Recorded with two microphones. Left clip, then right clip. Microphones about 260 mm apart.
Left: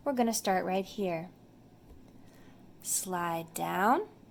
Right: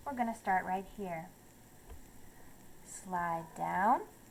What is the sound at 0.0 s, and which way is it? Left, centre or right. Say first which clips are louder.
A woman's voice: left 6 dB; left.